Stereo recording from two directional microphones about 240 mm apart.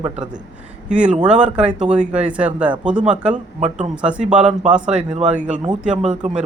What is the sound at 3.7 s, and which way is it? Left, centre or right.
Speech, centre.